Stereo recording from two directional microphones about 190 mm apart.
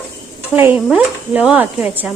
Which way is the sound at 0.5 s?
10° right (ahead or behind).